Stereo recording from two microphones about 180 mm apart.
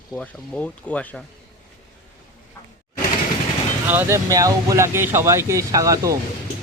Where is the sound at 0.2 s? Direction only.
5° left (ahead or behind).